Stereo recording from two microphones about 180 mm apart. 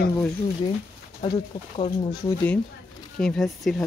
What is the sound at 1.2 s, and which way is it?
Speech, 25° left (ahead or behind).